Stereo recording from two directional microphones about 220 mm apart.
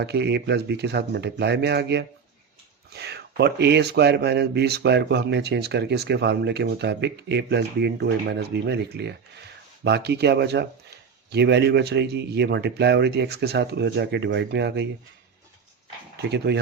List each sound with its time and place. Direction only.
0.0 s speech: 50° right (ahead or behind)
16.5 s speech: 50° right (ahead or behind)